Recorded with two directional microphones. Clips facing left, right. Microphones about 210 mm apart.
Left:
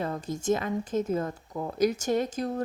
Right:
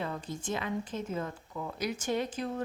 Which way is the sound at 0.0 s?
40° left (ahead or behind).